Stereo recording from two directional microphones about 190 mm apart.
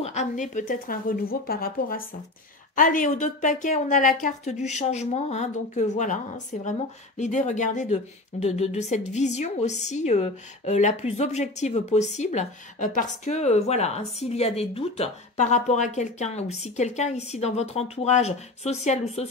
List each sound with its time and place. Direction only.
0.0 s a woman's voice: 35° left (ahead or behind)